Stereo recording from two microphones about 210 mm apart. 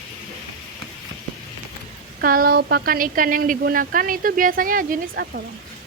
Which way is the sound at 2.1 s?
45° right (ahead or behind).